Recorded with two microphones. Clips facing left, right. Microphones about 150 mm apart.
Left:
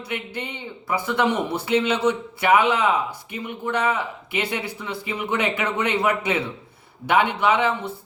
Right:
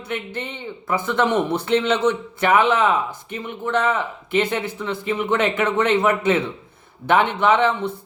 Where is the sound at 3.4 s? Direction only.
15° left (ahead or behind).